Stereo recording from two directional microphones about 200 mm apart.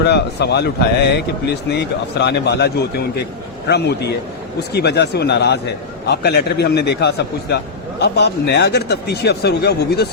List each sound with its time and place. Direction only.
0.0 s speech: 55° left (ahead or behind)